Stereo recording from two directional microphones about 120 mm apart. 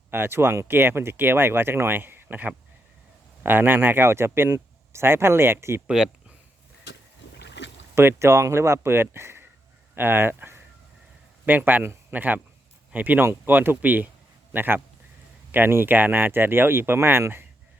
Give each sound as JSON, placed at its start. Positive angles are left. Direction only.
{"t": 0.1, "sound": "speech", "side_deg": -20}
{"t": 7.9, "sound": "speech", "side_deg": -20}